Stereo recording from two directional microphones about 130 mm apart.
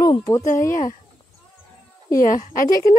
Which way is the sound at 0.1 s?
30° left (ahead or behind).